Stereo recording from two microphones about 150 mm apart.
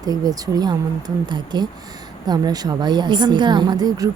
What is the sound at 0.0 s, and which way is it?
A woman's voice, 25° right (ahead or behind).